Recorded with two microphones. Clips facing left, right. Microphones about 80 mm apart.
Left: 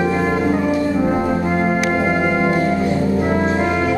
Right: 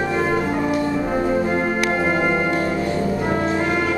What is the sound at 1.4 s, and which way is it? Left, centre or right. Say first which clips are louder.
Music: left 2 dB; centre.